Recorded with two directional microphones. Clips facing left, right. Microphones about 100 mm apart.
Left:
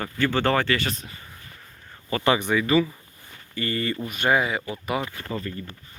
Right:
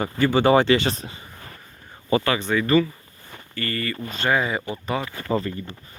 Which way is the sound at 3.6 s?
20° left (ahead or behind).